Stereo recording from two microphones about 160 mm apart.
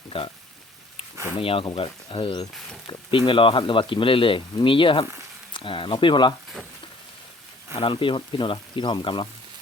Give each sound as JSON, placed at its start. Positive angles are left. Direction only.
{"t": 0.1, "sound": "speech", "side_deg": 35}
{"t": 1.4, "sound": "speech", "side_deg": 35}
{"t": 7.8, "sound": "speech", "side_deg": 30}